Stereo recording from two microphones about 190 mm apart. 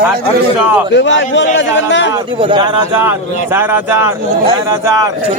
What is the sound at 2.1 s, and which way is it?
Speech, 25° right (ahead or behind).